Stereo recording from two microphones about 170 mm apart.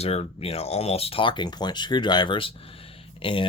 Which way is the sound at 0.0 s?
35° left (ahead or behind).